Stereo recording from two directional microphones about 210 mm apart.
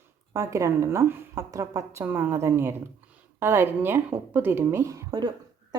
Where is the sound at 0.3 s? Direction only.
15° right (ahead or behind).